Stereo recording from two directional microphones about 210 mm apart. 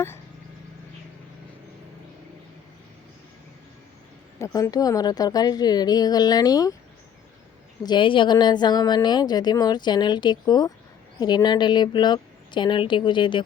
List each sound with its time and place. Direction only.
4.4 s a woman's voice: 15° left (ahead or behind)
7.9 s a woman's voice: 25° left (ahead or behind)